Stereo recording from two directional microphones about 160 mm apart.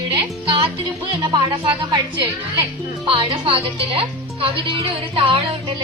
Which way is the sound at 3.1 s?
30° right (ahead or behind).